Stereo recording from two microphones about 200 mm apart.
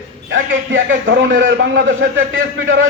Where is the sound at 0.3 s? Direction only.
70° right (ahead or behind).